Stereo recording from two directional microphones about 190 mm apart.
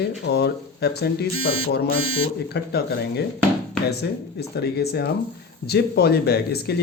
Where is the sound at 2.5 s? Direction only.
60° left (ahead or behind).